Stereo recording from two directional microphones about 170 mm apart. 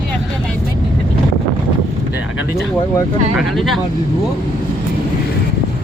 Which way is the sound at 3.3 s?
Centre (ahead or behind).